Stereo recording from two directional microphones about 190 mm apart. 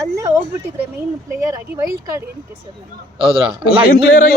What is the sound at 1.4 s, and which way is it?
Speech, 15° right (ahead or behind).